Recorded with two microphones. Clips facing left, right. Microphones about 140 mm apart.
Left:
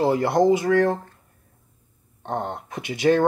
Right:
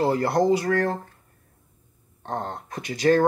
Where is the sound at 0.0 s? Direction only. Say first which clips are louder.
Left 2 dB; 20° left (ahead or behind).